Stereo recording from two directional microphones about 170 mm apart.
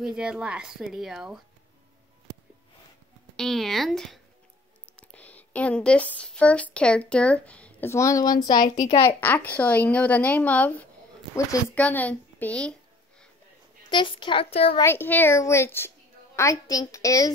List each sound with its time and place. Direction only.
0.0 s speech: 5° right (ahead or behind)
3.3 s speech: centre (ahead or behind); by 8.5 s 20° left (ahead or behind)
8.5 s a woman's voice: 55° left (ahead or behind)
8.8 s a child's voice: 35° left (ahead or behind)
9.2 s speech: 10° left (ahead or behind)
13.8 s a child's voice: 30° left (ahead or behind)
14.8 s a woman's voice: 15° left (ahead or behind)